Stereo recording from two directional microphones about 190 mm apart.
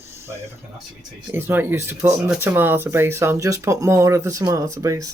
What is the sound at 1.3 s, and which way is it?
Speech, 10° right (ahead or behind).